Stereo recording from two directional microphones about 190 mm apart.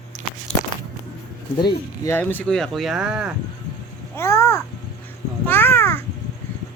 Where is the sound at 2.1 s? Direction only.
10° left (ahead or behind).